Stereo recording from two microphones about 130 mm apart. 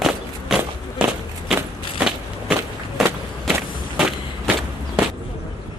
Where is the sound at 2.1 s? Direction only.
5° right (ahead or behind).